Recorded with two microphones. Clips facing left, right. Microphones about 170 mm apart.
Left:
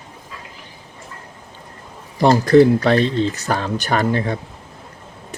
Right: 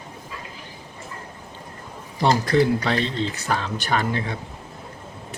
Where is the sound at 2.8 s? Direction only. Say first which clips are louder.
Left 7 dB; 50° left (ahead or behind).